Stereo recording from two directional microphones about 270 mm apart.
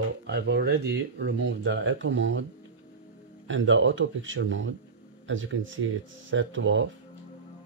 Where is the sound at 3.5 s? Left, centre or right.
Right.